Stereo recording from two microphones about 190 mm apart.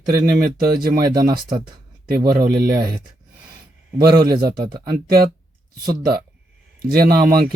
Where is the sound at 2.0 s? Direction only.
50° right (ahead or behind).